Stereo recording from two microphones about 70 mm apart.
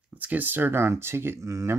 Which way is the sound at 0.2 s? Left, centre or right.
Right.